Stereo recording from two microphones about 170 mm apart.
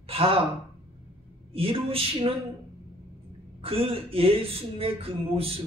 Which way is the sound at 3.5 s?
35° right (ahead or behind).